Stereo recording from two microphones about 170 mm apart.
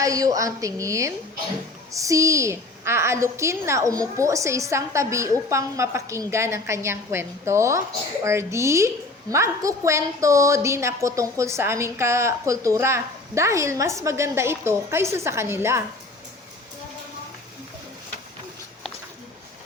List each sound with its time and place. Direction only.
0.0 s a woman's voice: 20° right (ahead or behind)